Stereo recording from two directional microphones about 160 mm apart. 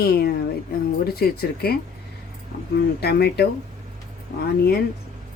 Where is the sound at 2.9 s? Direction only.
85° left.